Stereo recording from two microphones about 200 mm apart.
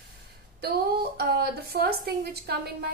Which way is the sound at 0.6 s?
55° right (ahead or behind).